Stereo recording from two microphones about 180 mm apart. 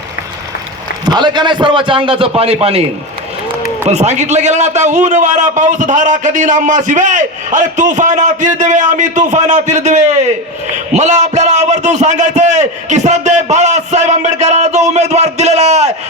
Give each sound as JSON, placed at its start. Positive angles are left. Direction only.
{"t": 1.0, "sound": "a man's voice", "side_deg": -25}
{"t": 3.8, "sound": "a man's voice", "side_deg": -40}